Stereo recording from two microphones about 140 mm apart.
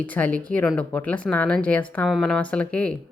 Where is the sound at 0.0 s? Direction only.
10° left (ahead or behind).